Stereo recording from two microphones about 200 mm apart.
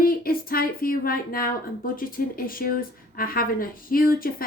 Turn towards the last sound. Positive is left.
turn(degrees=45)  # may be behind; listen again after turning